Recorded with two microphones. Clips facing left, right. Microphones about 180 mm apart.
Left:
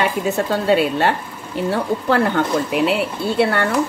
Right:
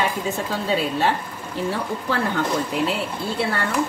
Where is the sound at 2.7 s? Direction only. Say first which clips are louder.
Left 7 dB; 70° left (ahead or behind).